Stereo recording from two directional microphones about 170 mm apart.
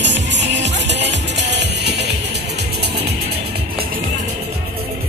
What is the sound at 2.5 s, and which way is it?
Music, 80° right.